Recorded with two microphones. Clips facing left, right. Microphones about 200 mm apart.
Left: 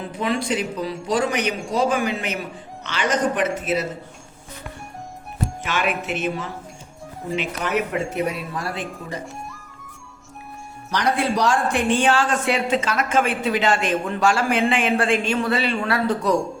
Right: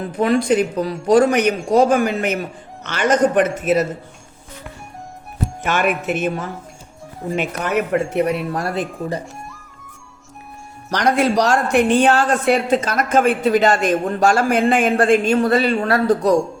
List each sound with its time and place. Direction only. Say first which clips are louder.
0.0 s speech: right 7 dB; 50° right (ahead or behind)
5.6 s speech: right 6 dB; 50° right (ahead or behind)
8.7 s speech: right 7 dB; 35° right (ahead or behind)
10.9 s speech: right 5 dB; 75° right (ahead or behind)
11.9 s speech: right 3 dB; 40° right (ahead or behind)
12.2 s speech: right 5 dB; 55° right (ahead or behind)